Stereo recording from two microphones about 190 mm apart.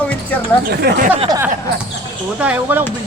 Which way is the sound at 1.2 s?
20° right (ahead or behind).